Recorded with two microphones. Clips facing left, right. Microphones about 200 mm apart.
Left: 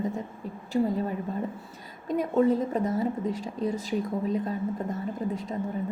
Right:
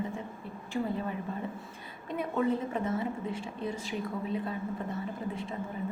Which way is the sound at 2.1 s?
40° left (ahead or behind).